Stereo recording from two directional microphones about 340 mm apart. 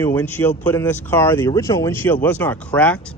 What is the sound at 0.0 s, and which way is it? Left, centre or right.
Speech, centre.